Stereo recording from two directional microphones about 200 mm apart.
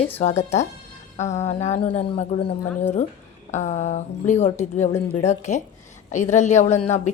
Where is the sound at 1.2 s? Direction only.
35° left (ahead or behind).